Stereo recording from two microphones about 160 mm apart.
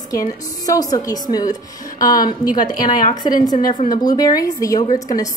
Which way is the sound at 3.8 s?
25° left (ahead or behind).